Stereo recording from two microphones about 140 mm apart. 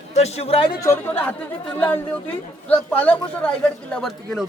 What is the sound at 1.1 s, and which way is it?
Speech, 10° left (ahead or behind).